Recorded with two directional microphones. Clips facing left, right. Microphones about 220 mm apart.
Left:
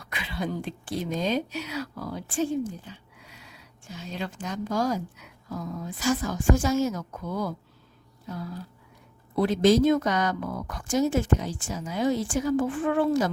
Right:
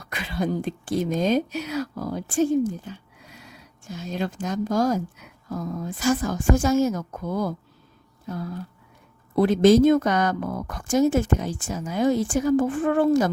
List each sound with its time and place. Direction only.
0.0 s speech: 45° right (ahead or behind)
9.3 s speech: 50° right (ahead or behind)